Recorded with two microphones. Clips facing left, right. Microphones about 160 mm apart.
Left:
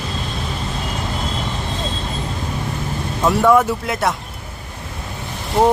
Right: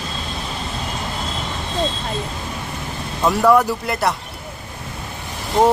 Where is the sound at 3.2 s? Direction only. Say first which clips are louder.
Left 1 dB; centre (ahead or behind).